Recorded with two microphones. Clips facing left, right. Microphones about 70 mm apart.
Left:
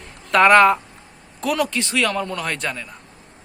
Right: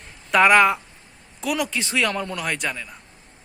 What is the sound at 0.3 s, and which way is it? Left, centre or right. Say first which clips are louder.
A man's voice: left 3 dB; centre.